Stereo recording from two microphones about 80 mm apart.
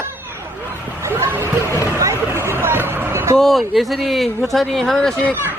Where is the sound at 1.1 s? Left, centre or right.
Right.